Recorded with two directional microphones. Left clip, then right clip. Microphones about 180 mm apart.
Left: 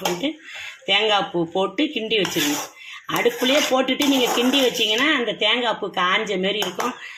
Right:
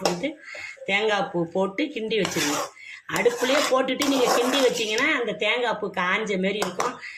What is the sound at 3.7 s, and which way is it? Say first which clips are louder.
A woman's voice: left 3 dB; 25° left (ahead or behind).